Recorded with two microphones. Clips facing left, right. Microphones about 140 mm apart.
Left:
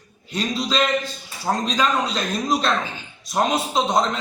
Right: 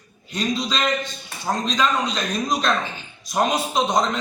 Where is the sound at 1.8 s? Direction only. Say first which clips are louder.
Even; 35° left (ahead or behind).